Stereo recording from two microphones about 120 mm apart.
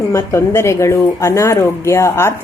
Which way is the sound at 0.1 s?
25° left (ahead or behind).